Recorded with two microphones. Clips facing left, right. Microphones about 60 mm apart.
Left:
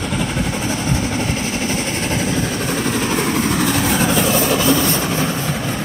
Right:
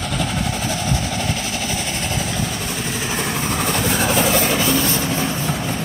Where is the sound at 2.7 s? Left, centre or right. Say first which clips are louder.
Left 6 dB; left.